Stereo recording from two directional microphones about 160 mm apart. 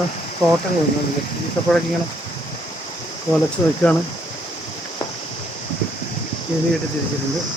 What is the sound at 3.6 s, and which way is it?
Speech, 20° left (ahead or behind).